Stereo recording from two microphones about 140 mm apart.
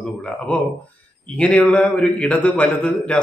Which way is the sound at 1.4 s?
10° left (ahead or behind).